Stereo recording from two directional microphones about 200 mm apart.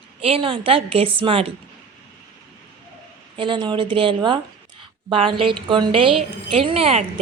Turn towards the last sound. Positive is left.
turn(degrees=-30)  # may be behind; listen again after turning